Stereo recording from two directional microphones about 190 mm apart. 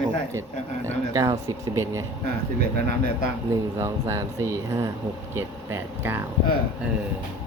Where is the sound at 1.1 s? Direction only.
15° right (ahead or behind).